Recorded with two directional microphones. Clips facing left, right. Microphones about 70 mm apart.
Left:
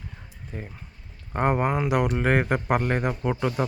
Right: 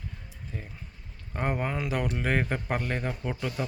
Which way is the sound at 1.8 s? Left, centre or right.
Left.